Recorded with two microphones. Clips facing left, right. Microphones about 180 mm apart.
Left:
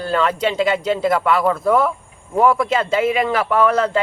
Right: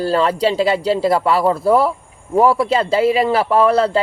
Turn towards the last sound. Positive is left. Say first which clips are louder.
# right 3 dB
turn(degrees=-35)  # may be behind; listen again after turning